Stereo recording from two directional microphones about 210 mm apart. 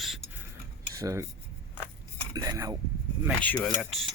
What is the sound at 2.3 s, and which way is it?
Speech, 15° right (ahead or behind).